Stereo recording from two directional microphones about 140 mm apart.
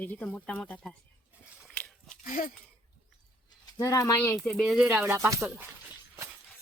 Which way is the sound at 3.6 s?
25° left (ahead or behind).